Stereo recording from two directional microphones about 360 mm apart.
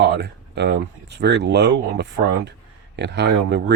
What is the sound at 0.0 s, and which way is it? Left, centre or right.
Speech, right.